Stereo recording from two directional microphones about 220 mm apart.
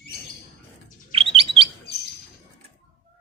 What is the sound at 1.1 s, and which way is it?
Bird, 25° right (ahead or behind).